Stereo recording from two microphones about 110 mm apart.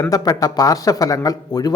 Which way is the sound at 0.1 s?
35° left (ahead or behind).